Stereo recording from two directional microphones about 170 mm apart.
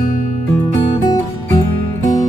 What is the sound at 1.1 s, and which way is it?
Music, 20° left (ahead or behind).